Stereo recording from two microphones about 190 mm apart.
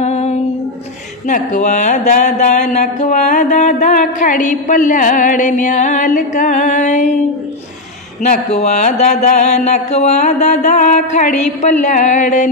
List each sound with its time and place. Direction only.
0.0 s a sound: 35° left (ahead or behind)
1.2 s speech: 40° left (ahead or behind)
8.2 s speech: 35° left (ahead or behind)